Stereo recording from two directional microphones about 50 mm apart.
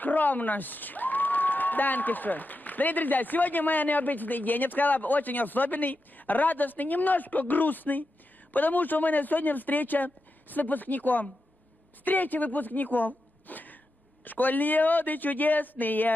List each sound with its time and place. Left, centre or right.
0.0 s a woman's voice: left